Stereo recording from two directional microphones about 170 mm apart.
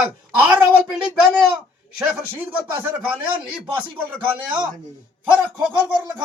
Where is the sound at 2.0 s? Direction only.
10° right (ahead or behind).